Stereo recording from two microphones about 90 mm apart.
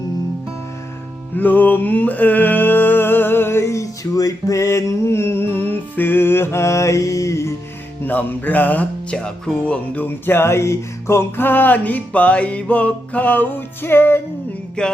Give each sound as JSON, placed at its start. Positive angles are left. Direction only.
{"t": 1.4, "sound": "music", "side_deg": 20}
{"t": 8.0, "sound": "music", "side_deg": 20}
{"t": 14.8, "sound": "music", "side_deg": 10}